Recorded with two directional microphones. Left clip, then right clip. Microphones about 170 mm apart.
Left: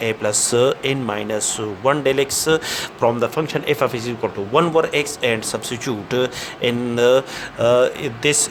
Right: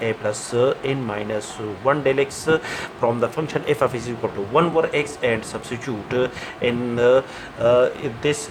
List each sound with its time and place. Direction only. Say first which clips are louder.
0.0 s speech: left 3 dB; 55° left (ahead or behind)